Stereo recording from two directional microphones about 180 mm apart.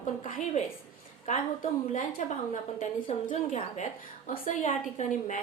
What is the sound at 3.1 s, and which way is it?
Speech, 30° left (ahead or behind).